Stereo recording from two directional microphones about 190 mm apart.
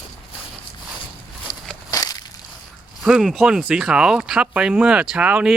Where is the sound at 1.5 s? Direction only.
45° left (ahead or behind).